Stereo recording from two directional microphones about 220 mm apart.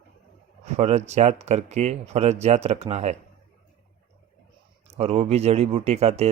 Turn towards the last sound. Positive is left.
turn(degrees=-30)  # may be behind; listen again after turning